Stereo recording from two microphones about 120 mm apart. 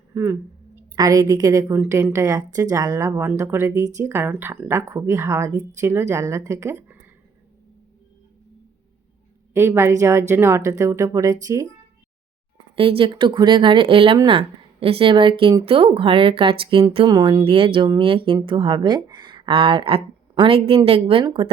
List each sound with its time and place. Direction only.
0.1 s speech: 20° right (ahead or behind)
9.5 s speech: 20° right (ahead or behind)
12.7 s speech: 50° right (ahead or behind)
17.1 s speech: 35° right (ahead or behind)